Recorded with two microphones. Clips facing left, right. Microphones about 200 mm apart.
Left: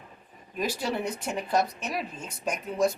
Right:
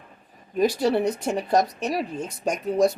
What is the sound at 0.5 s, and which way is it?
Speech, 35° right (ahead or behind).